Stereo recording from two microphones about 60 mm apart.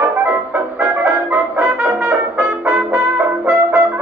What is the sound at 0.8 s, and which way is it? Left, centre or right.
Music, right.